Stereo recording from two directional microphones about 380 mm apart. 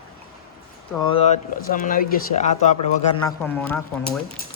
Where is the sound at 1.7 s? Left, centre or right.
Left.